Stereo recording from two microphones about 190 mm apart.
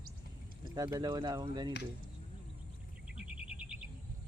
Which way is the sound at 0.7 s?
20° right (ahead or behind).